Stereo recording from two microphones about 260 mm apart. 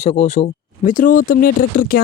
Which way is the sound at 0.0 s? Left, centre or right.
Left.